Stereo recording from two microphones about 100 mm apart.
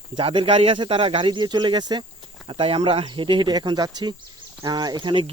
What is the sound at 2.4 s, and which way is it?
Speech, 65° right (ahead or behind).